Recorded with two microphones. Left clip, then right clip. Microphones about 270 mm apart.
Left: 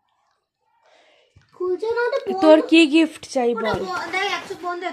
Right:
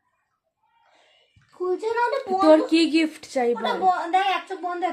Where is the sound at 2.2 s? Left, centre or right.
Left.